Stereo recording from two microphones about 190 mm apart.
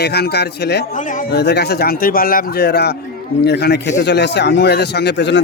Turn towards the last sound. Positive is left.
turn(degrees=65)  # may be behind; listen again after turning